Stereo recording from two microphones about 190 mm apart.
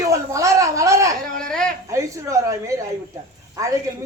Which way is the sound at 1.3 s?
5° left (ahead or behind).